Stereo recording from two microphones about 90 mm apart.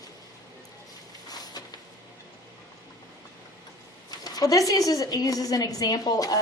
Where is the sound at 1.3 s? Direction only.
45° left (ahead or behind).